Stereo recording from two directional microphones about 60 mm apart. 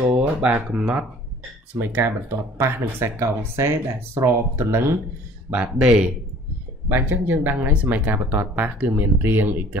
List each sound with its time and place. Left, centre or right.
0.0 s speech: right
1.8 s speech: right
5.8 s a man's voice: centre
6.9 s speech: right